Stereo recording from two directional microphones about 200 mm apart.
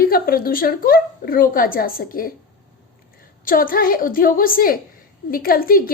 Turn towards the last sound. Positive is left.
turn(degrees=45)  # may be behind; listen again after turning